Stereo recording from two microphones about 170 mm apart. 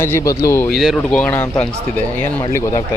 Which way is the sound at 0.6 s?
Centre (ahead or behind).